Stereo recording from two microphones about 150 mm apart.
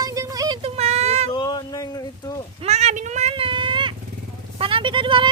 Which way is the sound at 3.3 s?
35° right (ahead or behind).